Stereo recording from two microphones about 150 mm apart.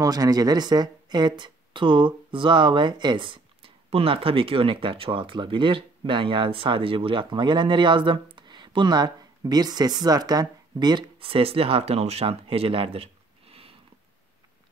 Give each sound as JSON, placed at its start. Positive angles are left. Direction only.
{"t": 0.0, "sound": "speech", "side_deg": -25}